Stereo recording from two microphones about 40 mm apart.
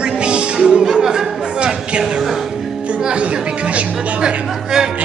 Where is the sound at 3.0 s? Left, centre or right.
Right.